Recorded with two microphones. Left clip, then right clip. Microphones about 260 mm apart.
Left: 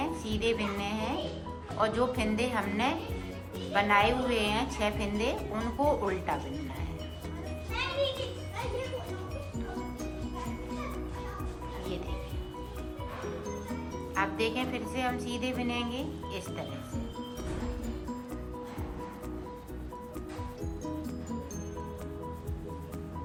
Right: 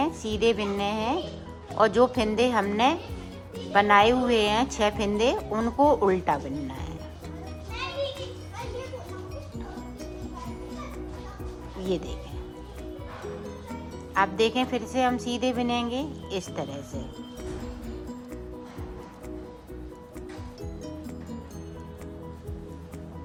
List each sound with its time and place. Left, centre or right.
0.0 s a woman's voice: right
14.1 s a woman's voice: centre